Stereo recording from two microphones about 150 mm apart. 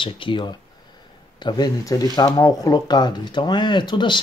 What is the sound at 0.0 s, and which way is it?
Speech, 35° left (ahead or behind).